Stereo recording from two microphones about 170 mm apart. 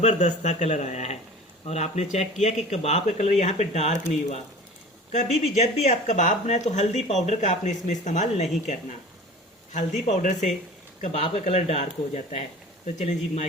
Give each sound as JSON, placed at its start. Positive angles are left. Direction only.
{"t": 0.0, "sound": "speech", "side_deg": 45}
{"t": 9.7, "sound": "speech", "side_deg": 45}